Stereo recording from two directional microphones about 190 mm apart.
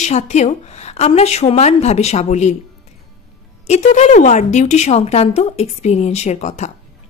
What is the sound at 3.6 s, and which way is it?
A woman's voice, 35° left (ahead or behind).